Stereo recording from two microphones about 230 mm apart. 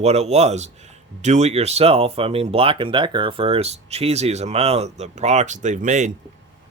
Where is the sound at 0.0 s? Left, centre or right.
Right.